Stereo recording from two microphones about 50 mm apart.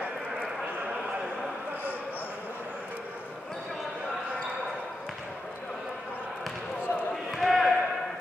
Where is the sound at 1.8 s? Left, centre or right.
Left.